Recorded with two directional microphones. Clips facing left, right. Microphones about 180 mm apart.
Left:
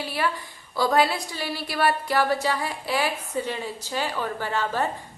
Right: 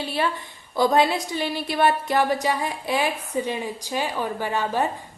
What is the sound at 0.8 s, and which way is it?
A woman's voice, 20° right (ahead or behind).